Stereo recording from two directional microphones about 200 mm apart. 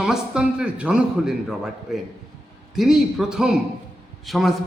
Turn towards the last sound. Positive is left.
turn(degrees=0)  # may be behind; listen again after turning